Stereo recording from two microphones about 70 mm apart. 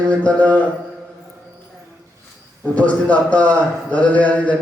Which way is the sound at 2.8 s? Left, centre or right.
Centre.